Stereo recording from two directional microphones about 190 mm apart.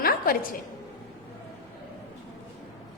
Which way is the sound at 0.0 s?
50° left (ahead or behind).